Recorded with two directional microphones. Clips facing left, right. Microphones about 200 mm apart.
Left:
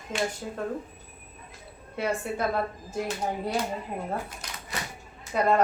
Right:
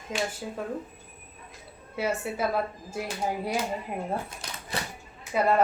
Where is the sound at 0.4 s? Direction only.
5° right (ahead or behind).